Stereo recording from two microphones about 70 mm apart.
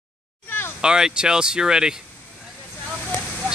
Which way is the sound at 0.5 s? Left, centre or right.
Left.